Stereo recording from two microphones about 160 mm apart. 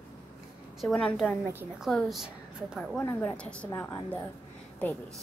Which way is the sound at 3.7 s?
20° left (ahead or behind).